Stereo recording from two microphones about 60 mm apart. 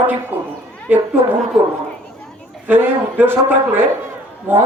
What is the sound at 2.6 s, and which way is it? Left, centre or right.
Speech, right.